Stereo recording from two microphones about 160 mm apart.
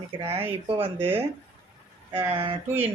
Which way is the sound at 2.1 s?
35° right (ahead or behind).